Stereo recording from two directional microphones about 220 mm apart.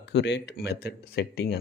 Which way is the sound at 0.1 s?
50° left (ahead or behind).